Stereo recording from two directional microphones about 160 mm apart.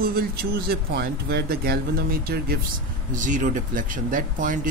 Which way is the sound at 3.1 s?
55° right (ahead or behind).